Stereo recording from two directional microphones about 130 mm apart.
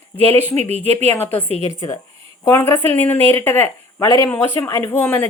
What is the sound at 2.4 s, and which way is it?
Speech, 20° left (ahead or behind).